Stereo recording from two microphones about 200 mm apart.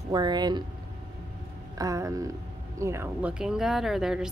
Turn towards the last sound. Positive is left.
turn(degrees=-5)  # may be behind; listen again after turning